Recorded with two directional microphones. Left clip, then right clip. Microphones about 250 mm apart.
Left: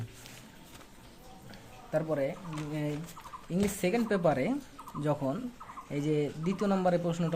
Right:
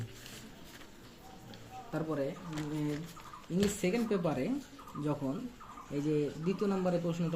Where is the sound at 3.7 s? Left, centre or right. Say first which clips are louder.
Left 3 dB; left.